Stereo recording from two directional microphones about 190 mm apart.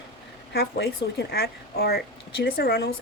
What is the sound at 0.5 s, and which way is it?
Speech, 55° left (ahead or behind).